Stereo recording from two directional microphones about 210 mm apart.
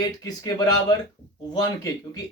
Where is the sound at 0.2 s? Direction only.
20° left (ahead or behind).